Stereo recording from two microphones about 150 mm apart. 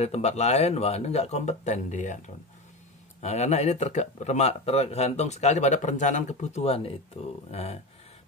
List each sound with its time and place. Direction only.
0.0 s speech: 45° left (ahead or behind)
3.2 s speech: 45° left (ahead or behind)